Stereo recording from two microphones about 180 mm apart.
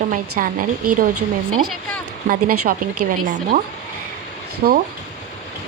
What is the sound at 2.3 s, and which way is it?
A woman's voice, 50° right (ahead or behind).